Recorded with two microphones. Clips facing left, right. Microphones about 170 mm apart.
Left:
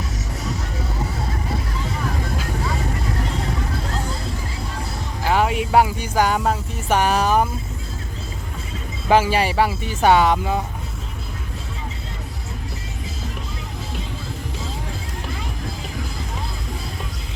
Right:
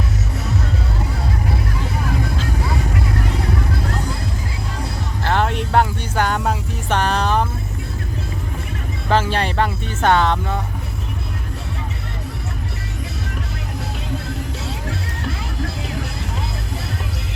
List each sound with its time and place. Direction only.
5.2 s music: 5° left (ahead or behind)
9.0 s speech: 10° left (ahead or behind)
14.6 s music: 75° right (ahead or behind)